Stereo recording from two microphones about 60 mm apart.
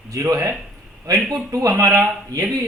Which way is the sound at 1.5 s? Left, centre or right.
Right.